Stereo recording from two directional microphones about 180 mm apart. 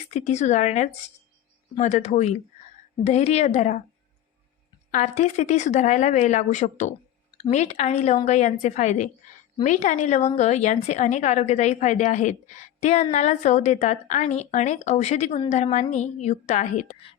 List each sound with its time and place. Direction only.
0.1 s a woman's voice: 40° left (ahead or behind)
4.9 s a woman's voice: 40° left (ahead or behind)